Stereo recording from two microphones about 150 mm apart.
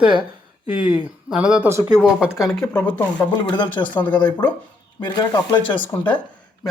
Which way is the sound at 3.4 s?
30° left (ahead or behind).